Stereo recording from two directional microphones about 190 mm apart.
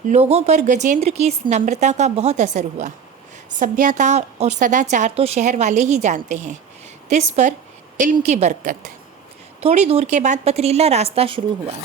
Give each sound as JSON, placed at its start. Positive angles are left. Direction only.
{"t": 0.1, "sound": "a woman's voice", "side_deg": -35}